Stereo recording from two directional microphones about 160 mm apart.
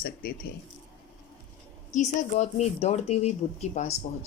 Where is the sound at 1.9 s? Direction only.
50° left (ahead or behind).